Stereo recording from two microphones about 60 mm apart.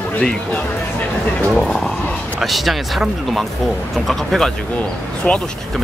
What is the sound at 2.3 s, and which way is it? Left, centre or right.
Speech, centre.